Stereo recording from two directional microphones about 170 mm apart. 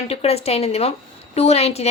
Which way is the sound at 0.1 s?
35° left (ahead or behind).